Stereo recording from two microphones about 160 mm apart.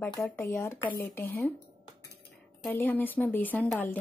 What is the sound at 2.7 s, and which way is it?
Speech, 15° left (ahead or behind).